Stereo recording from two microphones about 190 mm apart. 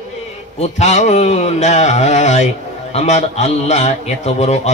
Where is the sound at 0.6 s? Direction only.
35° left (ahead or behind).